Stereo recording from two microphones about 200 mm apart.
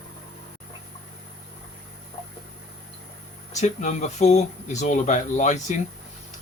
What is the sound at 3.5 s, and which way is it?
Speech, 35° left (ahead or behind).